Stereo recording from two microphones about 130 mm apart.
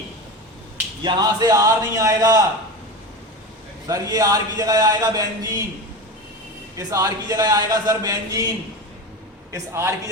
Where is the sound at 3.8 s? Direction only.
25° right (ahead or behind).